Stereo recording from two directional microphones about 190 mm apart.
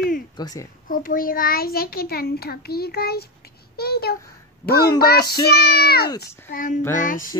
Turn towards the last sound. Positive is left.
turn(degrees=45)  # may be behind; listen again after turning